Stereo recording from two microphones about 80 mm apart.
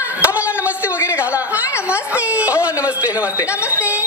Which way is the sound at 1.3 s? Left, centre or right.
Centre.